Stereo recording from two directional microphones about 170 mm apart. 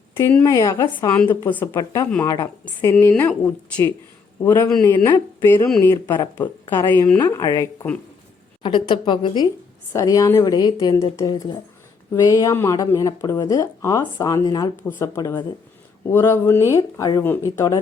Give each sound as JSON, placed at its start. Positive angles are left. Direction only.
{"t": 0.1, "sound": "speech", "side_deg": 15}
{"t": 8.6, "sound": "speech", "side_deg": 30}